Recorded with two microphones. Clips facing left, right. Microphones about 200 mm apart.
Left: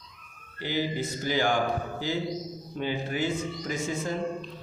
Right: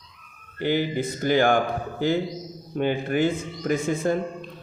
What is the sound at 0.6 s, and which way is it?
A man's voice, 55° right (ahead or behind).